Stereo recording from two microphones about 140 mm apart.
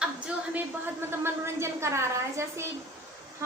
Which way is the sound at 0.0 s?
5° right (ahead or behind).